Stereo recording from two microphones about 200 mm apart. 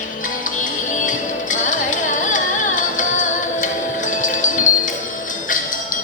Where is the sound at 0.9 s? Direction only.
40° left (ahead or behind).